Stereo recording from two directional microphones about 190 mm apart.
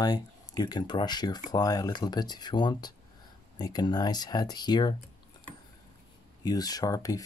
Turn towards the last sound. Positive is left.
turn(degrees=20)  # may be behind; listen again after turning